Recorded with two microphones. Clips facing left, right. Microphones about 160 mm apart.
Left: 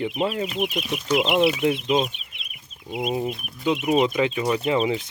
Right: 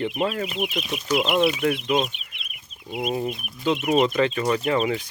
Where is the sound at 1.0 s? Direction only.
20° left (ahead or behind).